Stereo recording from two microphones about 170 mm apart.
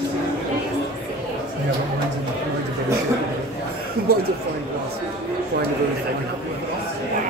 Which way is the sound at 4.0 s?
65° right (ahead or behind).